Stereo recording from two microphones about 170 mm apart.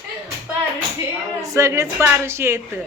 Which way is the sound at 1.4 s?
20° right (ahead or behind).